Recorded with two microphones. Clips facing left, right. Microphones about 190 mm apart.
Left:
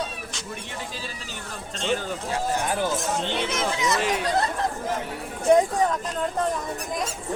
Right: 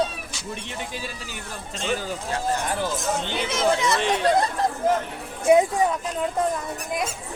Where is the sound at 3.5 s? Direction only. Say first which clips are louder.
Right 3 dB; 30° right (ahead or behind).